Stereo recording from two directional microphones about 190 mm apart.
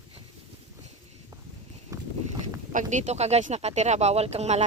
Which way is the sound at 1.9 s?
15° right (ahead or behind).